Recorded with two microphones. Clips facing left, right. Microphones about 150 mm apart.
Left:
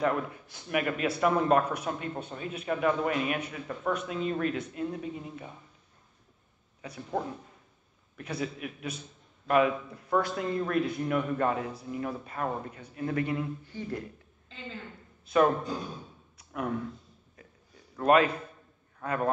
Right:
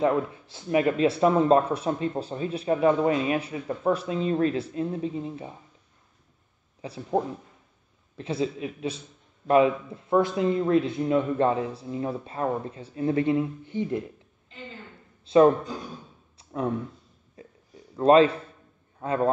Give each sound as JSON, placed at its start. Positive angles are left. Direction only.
{"t": 0.0, "sound": "speech", "side_deg": -25}
{"t": 6.8, "sound": "speech", "side_deg": -30}
{"t": 15.2, "sound": "speech", "side_deg": -25}
{"t": 16.3, "sound": "a sound", "side_deg": -30}
{"t": 17.9, "sound": "a man's voice", "side_deg": -30}